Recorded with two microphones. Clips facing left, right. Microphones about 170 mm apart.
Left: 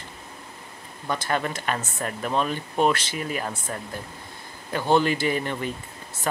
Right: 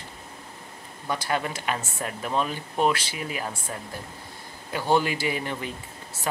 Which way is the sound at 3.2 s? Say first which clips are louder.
Left 3 dB; 45° left (ahead or behind).